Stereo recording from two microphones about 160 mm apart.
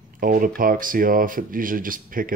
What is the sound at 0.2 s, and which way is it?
Speech, 60° right (ahead or behind).